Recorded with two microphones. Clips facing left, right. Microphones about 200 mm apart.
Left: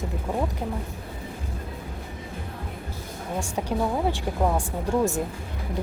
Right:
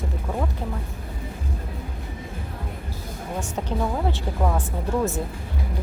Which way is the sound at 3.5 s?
10° left (ahead or behind).